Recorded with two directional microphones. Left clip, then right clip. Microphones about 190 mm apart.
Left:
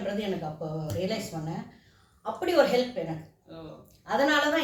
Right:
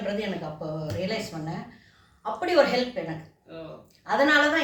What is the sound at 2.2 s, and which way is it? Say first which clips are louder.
Speech: right 2 dB; 15° left (ahead or behind).